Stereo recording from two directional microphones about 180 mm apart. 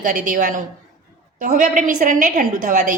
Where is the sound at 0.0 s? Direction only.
50° right (ahead or behind).